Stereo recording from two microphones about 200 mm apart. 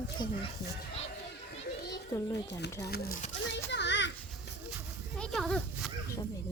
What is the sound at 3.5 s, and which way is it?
Children playing, 60° left (ahead or behind).